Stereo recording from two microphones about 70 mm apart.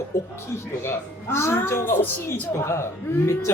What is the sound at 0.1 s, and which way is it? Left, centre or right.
A woman's voice, left.